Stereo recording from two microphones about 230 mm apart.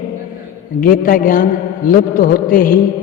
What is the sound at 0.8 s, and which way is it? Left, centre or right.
A man's voice, left.